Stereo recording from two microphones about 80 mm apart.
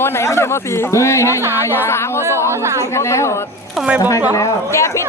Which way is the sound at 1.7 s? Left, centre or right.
Left.